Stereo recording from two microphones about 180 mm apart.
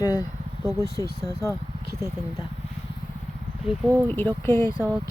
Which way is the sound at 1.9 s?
15° right (ahead or behind).